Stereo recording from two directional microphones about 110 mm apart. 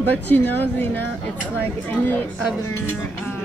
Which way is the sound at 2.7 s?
20° left (ahead or behind).